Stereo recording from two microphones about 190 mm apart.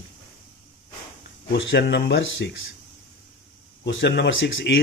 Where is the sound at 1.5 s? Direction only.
65° left (ahead or behind).